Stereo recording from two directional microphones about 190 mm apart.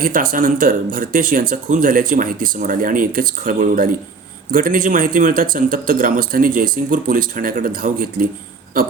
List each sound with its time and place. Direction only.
0.0 s speech: 45° right (ahead or behind)